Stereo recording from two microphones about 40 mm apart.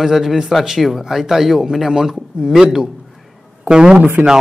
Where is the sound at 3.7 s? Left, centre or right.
Right.